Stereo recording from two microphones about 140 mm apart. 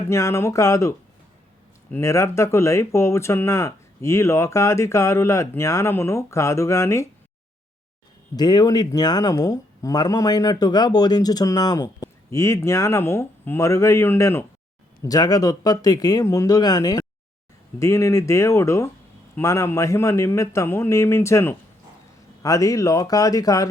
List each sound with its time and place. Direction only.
0.1 s speech: 20° left (ahead or behind)
8.4 s speech: 30° left (ahead or behind)